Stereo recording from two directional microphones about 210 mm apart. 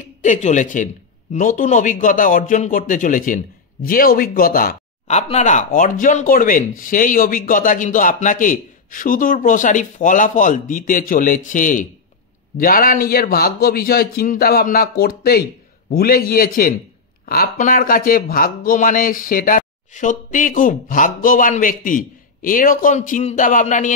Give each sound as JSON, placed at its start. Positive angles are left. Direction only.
{"t": 0.0, "sound": "a man's voice", "side_deg": 35}